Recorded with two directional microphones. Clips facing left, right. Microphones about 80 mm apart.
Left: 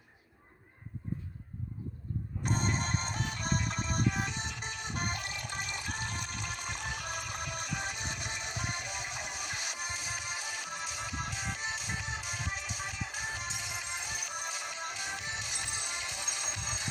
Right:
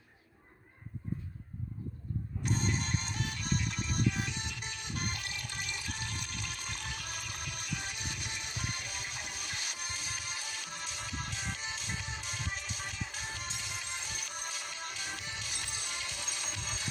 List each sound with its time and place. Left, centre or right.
2.4 s music: left